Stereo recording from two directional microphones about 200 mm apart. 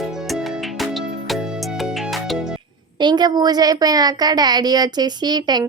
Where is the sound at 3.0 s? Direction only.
20° right (ahead or behind).